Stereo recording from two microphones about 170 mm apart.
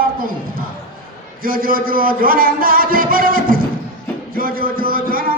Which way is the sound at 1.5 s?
55° right (ahead or behind).